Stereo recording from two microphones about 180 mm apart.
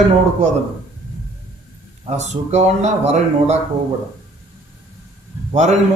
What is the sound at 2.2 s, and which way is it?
Speech, 40° right (ahead or behind).